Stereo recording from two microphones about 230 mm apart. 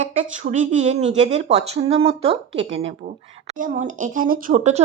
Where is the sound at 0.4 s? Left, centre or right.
Right.